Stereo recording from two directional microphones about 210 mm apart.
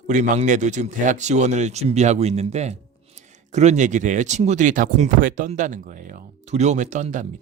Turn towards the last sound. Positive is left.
turn(degrees=-35)  # may be behind; listen again after turning